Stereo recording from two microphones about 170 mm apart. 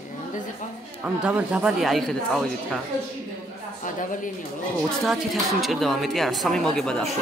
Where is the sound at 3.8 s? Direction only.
50° left (ahead or behind).